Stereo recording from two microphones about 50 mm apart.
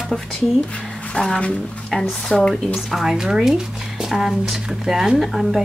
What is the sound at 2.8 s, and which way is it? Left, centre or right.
A woman's voice, centre.